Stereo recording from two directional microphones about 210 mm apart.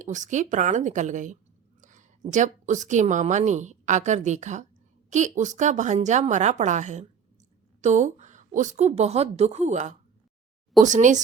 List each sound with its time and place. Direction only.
0.0 s a woman's voice: 35° right (ahead or behind)